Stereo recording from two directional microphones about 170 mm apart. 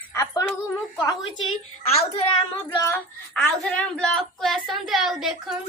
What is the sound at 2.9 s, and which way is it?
Speech, 5° left (ahead or behind).